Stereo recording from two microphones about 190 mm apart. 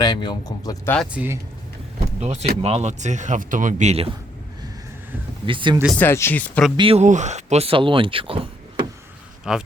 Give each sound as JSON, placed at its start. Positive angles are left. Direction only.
{"t": 0.0, "sound": "speech", "side_deg": 20}
{"t": 0.9, "sound": "speech", "side_deg": -10}
{"t": 2.2, "sound": "speech", "side_deg": -35}
{"t": 5.5, "sound": "speech", "side_deg": -25}
{"t": 6.0, "sound": "speech", "side_deg": 10}
{"t": 6.7, "sound": "speech", "side_deg": -30}
{"t": 9.4, "sound": "speech", "side_deg": -5}